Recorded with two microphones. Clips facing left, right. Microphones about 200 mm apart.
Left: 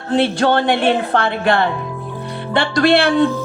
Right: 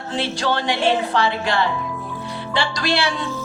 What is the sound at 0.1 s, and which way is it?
Speech, 55° left (ahead or behind).